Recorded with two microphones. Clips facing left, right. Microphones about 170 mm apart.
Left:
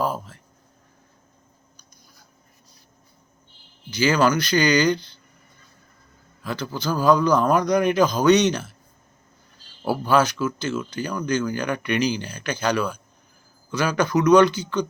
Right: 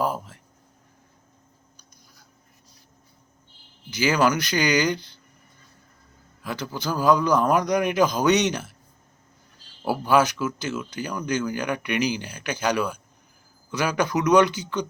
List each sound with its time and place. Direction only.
0.0 s speech: 15° right (ahead or behind)
3.8 s speech: 15° right (ahead or behind)
6.4 s speech: 10° right (ahead or behind)
9.8 s speech: 10° right (ahead or behind)